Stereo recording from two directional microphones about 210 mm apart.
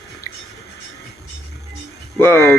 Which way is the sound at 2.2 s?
10° left (ahead or behind).